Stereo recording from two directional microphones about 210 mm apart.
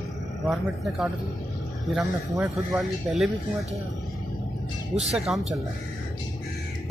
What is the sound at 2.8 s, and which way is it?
Speech, centre (ahead or behind).